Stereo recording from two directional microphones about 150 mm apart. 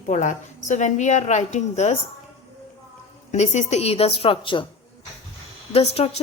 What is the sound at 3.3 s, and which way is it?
A woman's voice, 50° left (ahead or behind).